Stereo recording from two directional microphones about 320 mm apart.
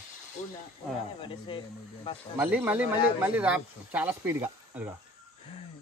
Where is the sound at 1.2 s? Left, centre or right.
Centre.